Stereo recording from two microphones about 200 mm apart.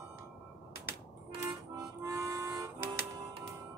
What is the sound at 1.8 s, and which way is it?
Harmonica, 15° right (ahead or behind).